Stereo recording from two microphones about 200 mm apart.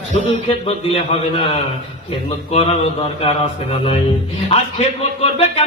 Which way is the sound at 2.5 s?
30° left (ahead or behind).